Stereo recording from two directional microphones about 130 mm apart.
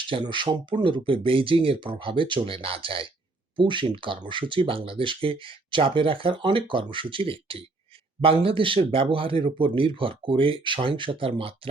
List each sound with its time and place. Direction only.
0.1 s speech: 40° right (ahead or behind)